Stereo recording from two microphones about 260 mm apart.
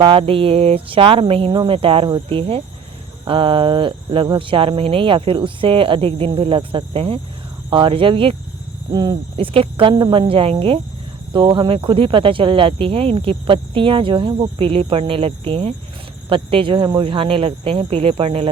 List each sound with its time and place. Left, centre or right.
0.0 s speech: centre